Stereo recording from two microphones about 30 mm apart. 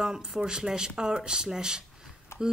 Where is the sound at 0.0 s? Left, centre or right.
Right.